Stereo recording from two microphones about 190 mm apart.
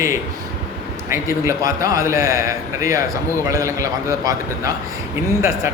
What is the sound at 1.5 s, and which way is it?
A man's voice, 15° right (ahead or behind).